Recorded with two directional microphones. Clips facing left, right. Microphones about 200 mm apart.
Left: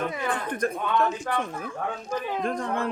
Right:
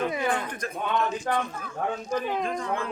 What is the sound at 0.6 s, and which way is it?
Speech, 55° left (ahead or behind).